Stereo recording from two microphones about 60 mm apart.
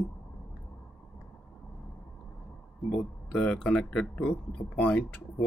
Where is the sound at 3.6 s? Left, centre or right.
Centre.